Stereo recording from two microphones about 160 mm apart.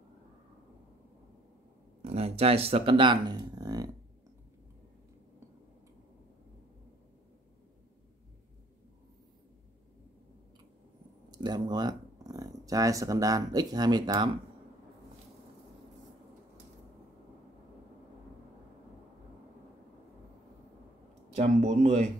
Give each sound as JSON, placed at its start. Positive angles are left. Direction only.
{"t": 2.0, "sound": "speech", "side_deg": -40}
{"t": 11.2, "sound": "speech", "side_deg": -25}
{"t": 21.4, "sound": "speech", "side_deg": -45}